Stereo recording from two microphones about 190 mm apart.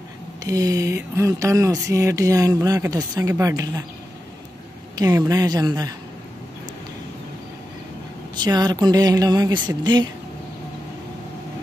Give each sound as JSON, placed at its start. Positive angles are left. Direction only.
{"t": 0.4, "sound": "speech", "side_deg": -20}
{"t": 4.9, "sound": "speech", "side_deg": -20}
{"t": 8.4, "sound": "speech", "side_deg": -20}